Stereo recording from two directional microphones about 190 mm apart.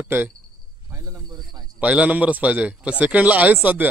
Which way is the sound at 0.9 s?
15° right (ahead or behind).